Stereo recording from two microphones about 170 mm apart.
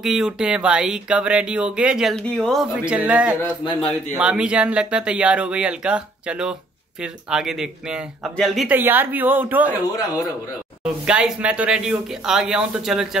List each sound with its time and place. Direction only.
0.0 s speech: centre (ahead or behind)
11.1 s speech: 5° right (ahead or behind)